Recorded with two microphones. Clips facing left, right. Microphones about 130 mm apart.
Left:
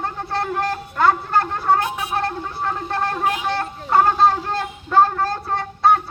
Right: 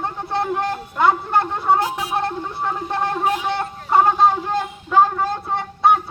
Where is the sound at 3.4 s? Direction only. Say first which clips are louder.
Even; 20° right (ahead or behind).